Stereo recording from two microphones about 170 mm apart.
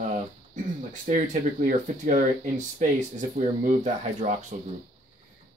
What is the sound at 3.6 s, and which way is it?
Speech, 45° right (ahead or behind).